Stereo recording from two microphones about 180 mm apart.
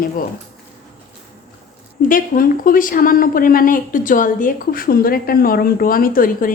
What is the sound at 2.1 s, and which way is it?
A woman's voice, 50° left (ahead or behind).